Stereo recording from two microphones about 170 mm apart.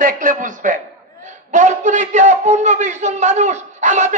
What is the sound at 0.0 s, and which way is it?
A man's voice, 50° right (ahead or behind).